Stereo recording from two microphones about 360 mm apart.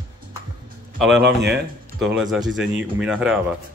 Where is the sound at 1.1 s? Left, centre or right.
Right.